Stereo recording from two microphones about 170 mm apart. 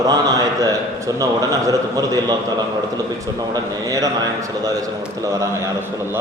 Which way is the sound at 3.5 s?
20° right (ahead or behind).